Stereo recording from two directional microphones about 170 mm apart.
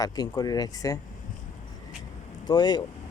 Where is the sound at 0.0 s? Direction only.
20° left (ahead or behind).